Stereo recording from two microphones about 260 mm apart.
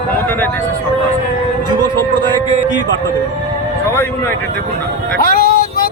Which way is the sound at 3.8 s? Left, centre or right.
Centre.